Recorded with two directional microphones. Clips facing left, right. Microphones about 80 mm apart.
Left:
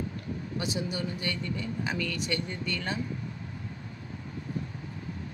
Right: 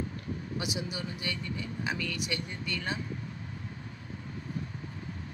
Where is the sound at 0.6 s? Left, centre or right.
Centre.